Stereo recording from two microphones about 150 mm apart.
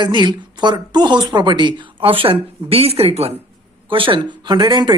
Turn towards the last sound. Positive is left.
turn(degrees=-30)  # may be behind; listen again after turning